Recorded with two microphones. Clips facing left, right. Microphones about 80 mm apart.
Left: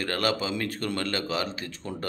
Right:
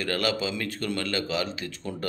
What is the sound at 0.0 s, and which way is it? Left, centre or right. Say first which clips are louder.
A man's voice: even; left.